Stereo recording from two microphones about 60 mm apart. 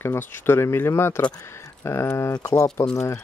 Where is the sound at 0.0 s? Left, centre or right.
Left.